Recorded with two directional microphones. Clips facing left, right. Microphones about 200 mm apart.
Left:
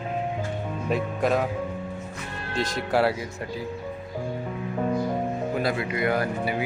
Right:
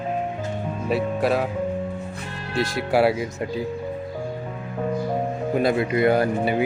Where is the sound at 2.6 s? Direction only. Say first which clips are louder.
Right 4 dB; 10° right (ahead or behind).